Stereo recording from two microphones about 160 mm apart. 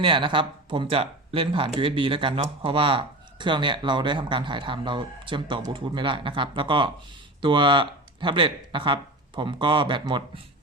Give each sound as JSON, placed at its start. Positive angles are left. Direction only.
{"t": 0.0, "sound": "speech", "side_deg": -30}